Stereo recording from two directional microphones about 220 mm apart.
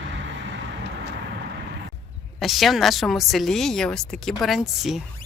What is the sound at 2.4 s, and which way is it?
Speech, centre (ahead or behind).